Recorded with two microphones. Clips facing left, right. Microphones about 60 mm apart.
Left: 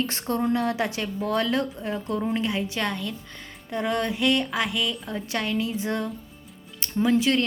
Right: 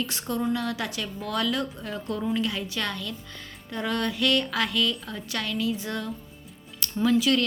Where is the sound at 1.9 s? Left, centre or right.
Centre.